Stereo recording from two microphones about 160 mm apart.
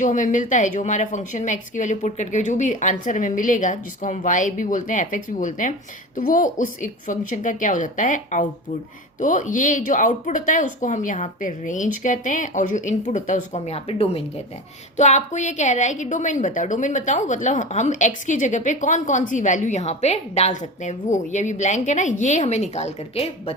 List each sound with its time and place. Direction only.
0.0 s a woman's voice: 50° left (ahead or behind)